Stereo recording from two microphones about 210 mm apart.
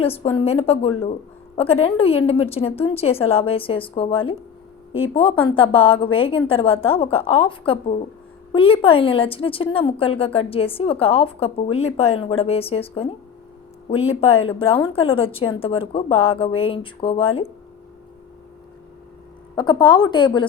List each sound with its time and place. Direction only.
0.0 s a woman's voice: 30° left (ahead or behind)
5.4 s a woman's voice: 25° left (ahead or behind)
19.5 s a woman's voice: 20° left (ahead or behind)